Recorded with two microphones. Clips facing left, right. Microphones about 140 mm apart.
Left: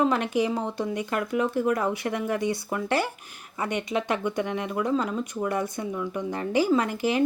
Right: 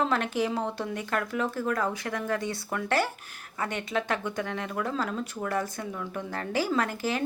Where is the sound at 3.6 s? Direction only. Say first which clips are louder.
Left 3 dB; 20° left (ahead or behind).